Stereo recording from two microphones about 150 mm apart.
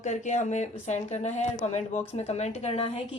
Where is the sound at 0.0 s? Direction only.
50° left (ahead or behind).